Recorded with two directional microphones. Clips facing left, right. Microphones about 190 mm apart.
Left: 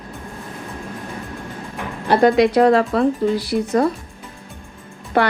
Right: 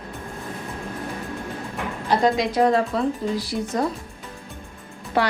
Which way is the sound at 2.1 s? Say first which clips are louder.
Left 7 dB; 65° left (ahead or behind).